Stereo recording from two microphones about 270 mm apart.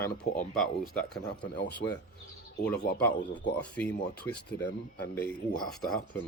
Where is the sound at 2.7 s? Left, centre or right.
Left.